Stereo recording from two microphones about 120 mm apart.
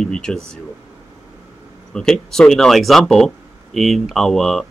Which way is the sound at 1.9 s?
5° left (ahead or behind).